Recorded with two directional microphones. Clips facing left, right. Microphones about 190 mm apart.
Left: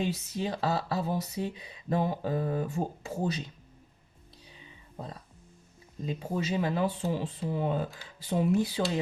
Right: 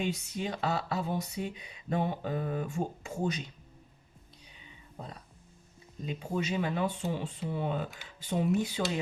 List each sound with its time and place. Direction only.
0.0 s speech: 35° left (ahead or behind)
4.5 s a sound: 35° left (ahead or behind)
6.1 s speech: 35° left (ahead or behind)